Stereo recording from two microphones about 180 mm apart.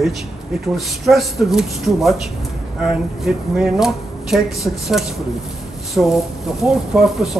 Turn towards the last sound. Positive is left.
turn(degrees=0)  # may be behind; listen again after turning